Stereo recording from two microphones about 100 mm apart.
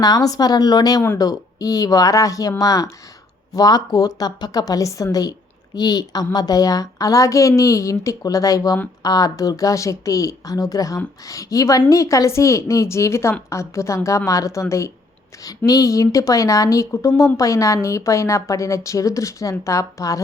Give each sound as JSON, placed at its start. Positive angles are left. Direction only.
{"t": 0.0, "sound": "a woman's voice", "side_deg": 40}